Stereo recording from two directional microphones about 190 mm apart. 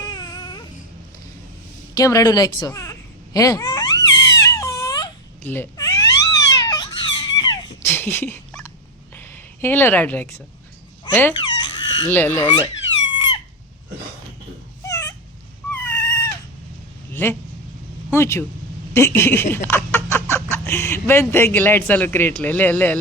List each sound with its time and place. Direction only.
0.0 s baby cry: 20° left (ahead or behind)
2.0 s a woman's voice: 15° left (ahead or behind)
3.3 s a sound: 20° left (ahead or behind)
9.1 s a woman's voice: 10° left (ahead or behind)
11.3 s a sound: 25° left (ahead or behind)
12.0 s a woman's voice: 10° left (ahead or behind)
13.1 s squeak: 25° left (ahead or behind)
14.8 s dog: 15° left (ahead or behind)
15.7 s cat: 10° left (ahead or behind)
17.1 s vehicle: 10° left (ahead or behind)
18.1 s a woman's voice: 15° left (ahead or behind)